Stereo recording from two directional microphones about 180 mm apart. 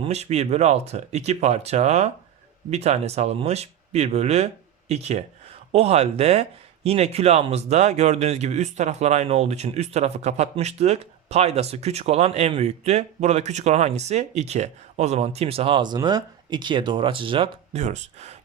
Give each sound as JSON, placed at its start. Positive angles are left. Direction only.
{"t": 0.0, "sound": "speech", "side_deg": -35}